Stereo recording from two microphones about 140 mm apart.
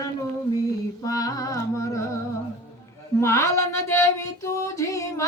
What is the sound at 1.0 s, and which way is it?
Music, 25° left (ahead or behind).